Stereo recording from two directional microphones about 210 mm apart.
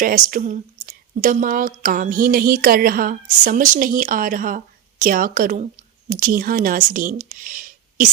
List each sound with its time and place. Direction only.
0.3 s speech: 40° right (ahead or behind)